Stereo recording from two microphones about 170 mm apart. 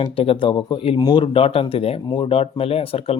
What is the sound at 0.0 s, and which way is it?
Speech, 30° left (ahead or behind).